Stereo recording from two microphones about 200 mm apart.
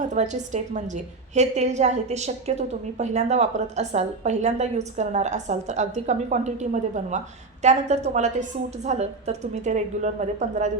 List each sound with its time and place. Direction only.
0.1 s a woman's voice: 35° right (ahead or behind)